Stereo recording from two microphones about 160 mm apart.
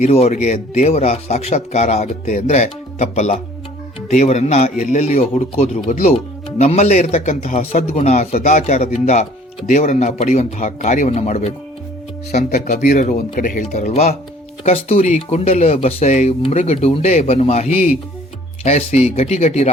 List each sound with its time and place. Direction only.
0.0 s speech: 40° left (ahead or behind)
12.5 s speech: 60° left (ahead or behind); by 19.7 s 40° left (ahead or behind)